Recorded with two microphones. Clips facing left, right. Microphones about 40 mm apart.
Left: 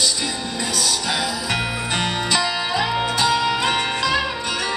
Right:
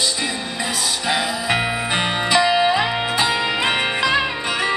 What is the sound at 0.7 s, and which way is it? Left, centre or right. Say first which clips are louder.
Music: right 2 dB; right.